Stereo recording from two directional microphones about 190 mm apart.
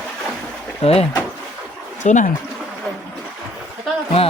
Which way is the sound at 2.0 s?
40° left (ahead or behind).